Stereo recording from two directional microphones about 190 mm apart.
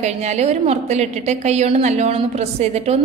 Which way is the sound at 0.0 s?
35° right (ahead or behind).